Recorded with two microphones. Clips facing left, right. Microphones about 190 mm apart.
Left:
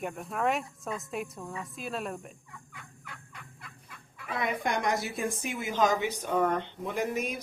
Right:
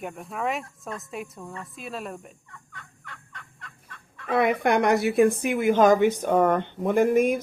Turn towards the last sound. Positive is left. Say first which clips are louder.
# right 11 dB
turn(degrees=-55)  # may be behind; listen again after turning